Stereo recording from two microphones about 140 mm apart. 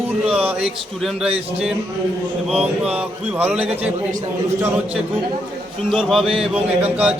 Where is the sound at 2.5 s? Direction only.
45° right (ahead or behind).